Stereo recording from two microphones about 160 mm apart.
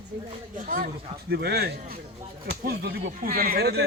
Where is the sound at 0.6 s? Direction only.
60° right (ahead or behind).